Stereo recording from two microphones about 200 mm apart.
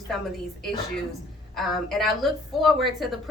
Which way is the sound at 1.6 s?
Centre (ahead or behind).